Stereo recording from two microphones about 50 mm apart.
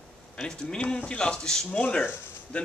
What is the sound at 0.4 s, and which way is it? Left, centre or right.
Speech, centre.